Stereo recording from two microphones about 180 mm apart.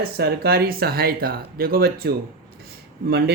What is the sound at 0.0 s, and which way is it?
Speech, 60° right (ahead or behind).